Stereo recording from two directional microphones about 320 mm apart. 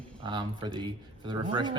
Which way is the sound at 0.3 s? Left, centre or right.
Centre.